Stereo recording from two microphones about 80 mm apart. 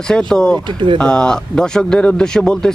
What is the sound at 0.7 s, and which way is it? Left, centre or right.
Speech, right.